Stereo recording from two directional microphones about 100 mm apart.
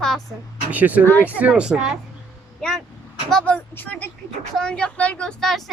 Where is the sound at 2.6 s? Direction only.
5° left (ahead or behind).